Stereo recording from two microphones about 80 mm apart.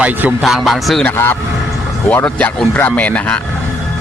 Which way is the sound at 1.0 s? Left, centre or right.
Left.